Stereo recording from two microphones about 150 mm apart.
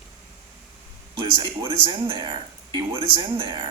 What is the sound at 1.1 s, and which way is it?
Speech, 30° right (ahead or behind).